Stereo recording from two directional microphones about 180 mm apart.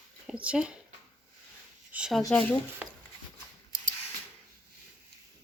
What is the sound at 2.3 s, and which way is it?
Speech, 10° left (ahead or behind).